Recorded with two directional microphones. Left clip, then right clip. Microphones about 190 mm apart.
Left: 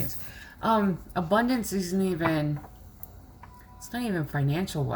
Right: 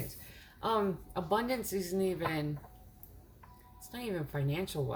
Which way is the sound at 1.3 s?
20° right (ahead or behind).